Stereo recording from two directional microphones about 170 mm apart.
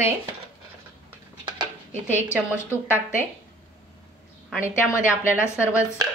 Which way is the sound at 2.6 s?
15° left (ahead or behind).